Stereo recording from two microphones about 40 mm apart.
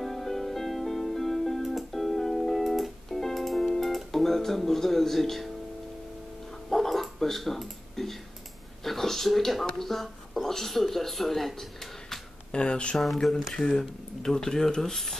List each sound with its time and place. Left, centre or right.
0.0 s music: centre
3.8 s speech: centre
6.7 s bow-wow: centre
8.8 s speech: centre
12.4 s speech: left
13.0 s speech: centre
13.4 s speech: centre